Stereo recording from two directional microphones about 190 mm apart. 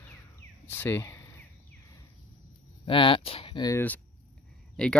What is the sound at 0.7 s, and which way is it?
Speech, 10° left (ahead or behind).